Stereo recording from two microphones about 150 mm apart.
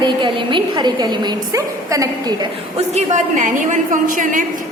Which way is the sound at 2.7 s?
50° right (ahead or behind).